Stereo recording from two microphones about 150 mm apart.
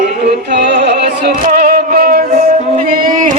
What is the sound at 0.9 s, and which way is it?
Music, 85° right.